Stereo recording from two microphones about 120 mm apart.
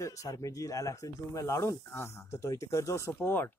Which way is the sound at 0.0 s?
30° left (ahead or behind).